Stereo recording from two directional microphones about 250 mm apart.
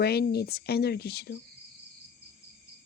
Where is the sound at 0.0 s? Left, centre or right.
Left.